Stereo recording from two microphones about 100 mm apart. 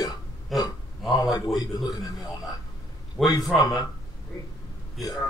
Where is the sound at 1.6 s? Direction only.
40° left (ahead or behind).